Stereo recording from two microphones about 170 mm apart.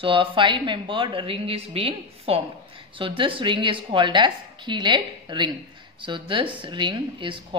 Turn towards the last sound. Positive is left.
turn(degrees=-30)  # may be behind; listen again after turning